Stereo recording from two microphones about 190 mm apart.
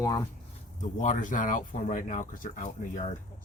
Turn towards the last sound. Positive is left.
turn(degrees=35)  # may be behind; listen again after turning